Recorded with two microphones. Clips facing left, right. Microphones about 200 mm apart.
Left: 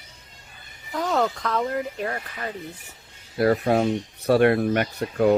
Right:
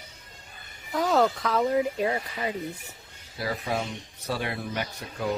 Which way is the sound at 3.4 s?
55° left (ahead or behind).